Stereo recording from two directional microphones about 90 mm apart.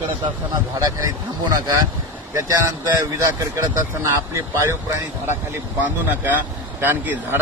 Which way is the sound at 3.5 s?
30° right (ahead or behind).